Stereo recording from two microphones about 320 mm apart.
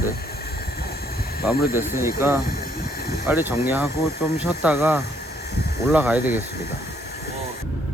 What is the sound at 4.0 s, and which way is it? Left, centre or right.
Speech, left.